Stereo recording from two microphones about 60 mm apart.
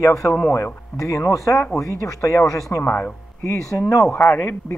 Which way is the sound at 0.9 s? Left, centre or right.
Left.